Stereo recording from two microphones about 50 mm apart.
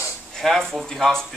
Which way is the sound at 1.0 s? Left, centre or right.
Centre.